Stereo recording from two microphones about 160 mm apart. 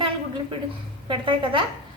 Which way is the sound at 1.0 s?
30° right (ahead or behind).